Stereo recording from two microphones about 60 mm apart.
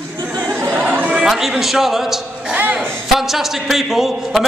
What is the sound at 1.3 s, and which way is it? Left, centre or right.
A man's voice, centre.